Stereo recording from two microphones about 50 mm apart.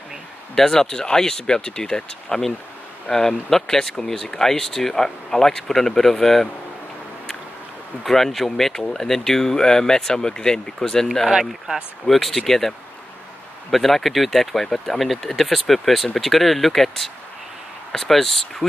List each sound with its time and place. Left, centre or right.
0.6 s speech: centre
8.0 s speech: centre
11.1 s speech: centre